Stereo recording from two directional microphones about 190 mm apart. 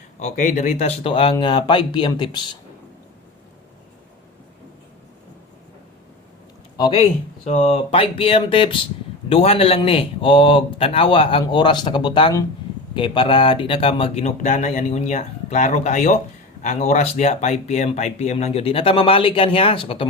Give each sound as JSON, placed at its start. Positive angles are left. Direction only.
{"t": 0.2, "sound": "a man's voice", "side_deg": 40}
{"t": 7.4, "sound": "a man's voice", "side_deg": 35}